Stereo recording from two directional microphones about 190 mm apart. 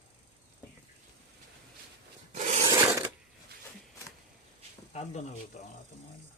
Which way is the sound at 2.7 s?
15° right (ahead or behind).